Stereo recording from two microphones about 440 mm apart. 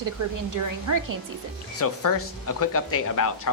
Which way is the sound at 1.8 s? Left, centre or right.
Left.